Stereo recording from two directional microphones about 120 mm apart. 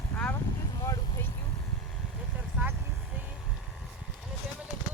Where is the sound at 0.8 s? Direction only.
25° left (ahead or behind).